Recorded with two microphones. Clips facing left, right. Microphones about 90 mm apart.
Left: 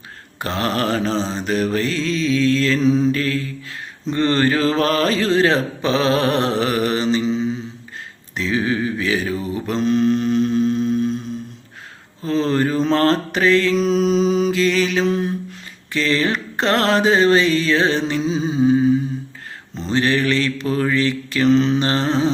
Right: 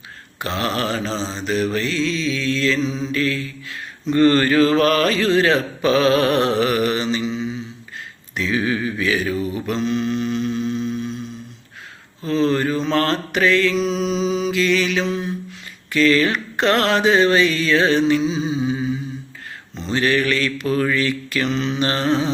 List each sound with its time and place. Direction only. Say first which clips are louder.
0.3 s mantra: left 1 dB; 40° left (ahead or behind)
10.7 s music: left 5 dB; 45° left (ahead or behind)
12.2 s mantra: even; 35° left (ahead or behind)
15.9 s mantra: right 3 dB; 30° left (ahead or behind)
18.3 s music: left 5 dB; 40° left (ahead or behind)
19.8 s mantra: left 1 dB; 30° left (ahead or behind)